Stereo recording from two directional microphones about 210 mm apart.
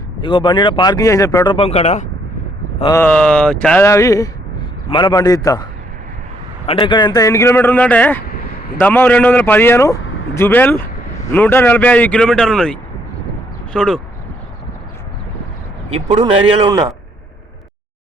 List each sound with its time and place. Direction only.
0.2 s speech: 25° left (ahead or behind)
2.9 s speech: 10° left (ahead or behind)
6.7 s speech: 25° left (ahead or behind); by 14.0 s 5° left (ahead or behind)
16.0 s a man's voice: 20° right (ahead or behind)